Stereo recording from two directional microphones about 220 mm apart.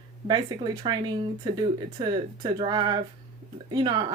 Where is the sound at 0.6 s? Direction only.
20° right (ahead or behind).